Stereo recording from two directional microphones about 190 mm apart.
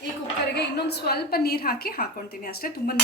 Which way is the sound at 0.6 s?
60° left (ahead or behind).